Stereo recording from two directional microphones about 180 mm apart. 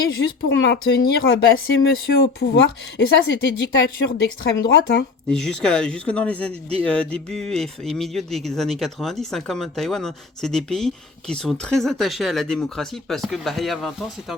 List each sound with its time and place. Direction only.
0.4 s speech: 75° left (ahead or behind)
1.5 s speech: 55° left (ahead or behind)
5.3 s speech: 5° left (ahead or behind)